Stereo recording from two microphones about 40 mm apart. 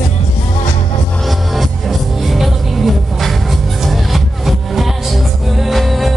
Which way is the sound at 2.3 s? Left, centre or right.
Centre.